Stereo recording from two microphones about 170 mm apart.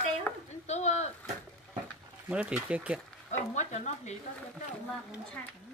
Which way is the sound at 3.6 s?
40° left (ahead or behind).